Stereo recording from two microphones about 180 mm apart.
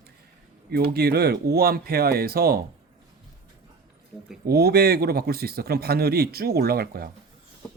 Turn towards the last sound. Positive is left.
turn(degrees=-60)  # may be behind; listen again after turning